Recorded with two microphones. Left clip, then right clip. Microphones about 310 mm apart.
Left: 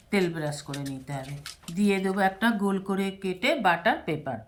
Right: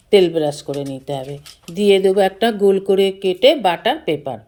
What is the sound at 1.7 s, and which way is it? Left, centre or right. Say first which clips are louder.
Speech: right 14 dB; right.